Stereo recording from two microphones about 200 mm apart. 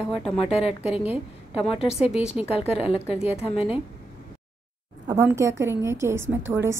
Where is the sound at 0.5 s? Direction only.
30° left (ahead or behind).